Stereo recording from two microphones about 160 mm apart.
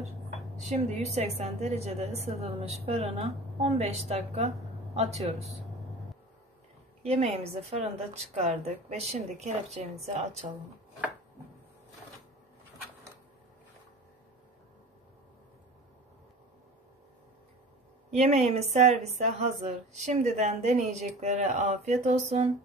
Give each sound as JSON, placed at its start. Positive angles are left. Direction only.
{"t": 0.6, "sound": "a woman's voice", "side_deg": -45}
{"t": 7.0, "sound": "a woman's voice", "side_deg": -40}
{"t": 18.1, "sound": "a woman's voice", "side_deg": -45}